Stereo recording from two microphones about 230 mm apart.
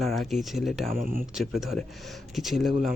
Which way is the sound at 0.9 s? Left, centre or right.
Right.